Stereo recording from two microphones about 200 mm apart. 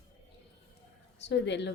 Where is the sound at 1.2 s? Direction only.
60° left (ahead or behind).